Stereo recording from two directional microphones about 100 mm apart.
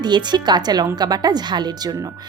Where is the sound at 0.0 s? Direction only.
50° right (ahead or behind).